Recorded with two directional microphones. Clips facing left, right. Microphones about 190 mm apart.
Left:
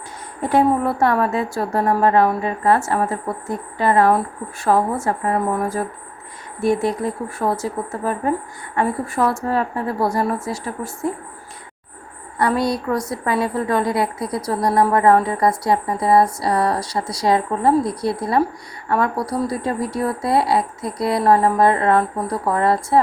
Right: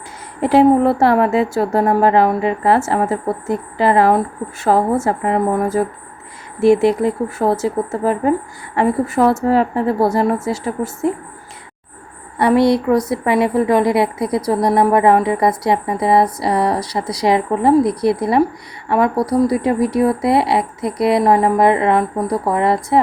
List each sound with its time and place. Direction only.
0.4 s a woman's voice: 25° right (ahead or behind)
12.4 s a woman's voice: 25° right (ahead or behind)